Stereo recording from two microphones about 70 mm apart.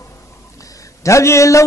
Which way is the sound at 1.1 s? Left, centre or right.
Left.